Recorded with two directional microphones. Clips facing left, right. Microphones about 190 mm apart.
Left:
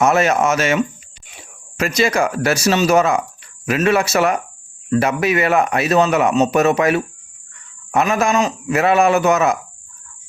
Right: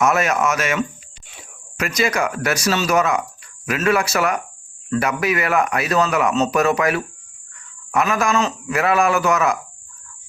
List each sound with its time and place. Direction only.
0.0 s a man's voice: 25° left (ahead or behind)